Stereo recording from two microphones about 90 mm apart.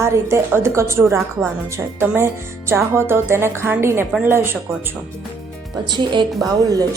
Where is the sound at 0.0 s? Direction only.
30° right (ahead or behind).